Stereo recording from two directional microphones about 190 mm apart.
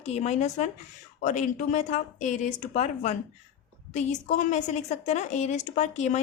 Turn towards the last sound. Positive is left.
turn(degrees=35)  # may be behind; listen again after turning